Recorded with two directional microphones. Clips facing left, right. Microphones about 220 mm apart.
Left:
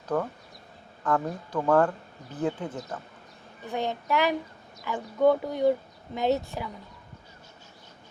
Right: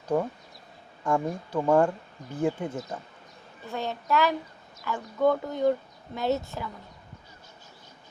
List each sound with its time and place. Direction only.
0.1 s speech: 10° right (ahead or behind)
3.7 s speech: 15° left (ahead or behind)